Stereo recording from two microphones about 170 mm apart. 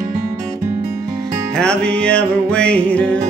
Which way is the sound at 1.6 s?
5° left (ahead or behind).